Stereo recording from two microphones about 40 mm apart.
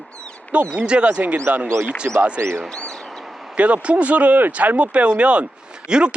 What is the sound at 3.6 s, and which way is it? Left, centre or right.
A man's voice, right.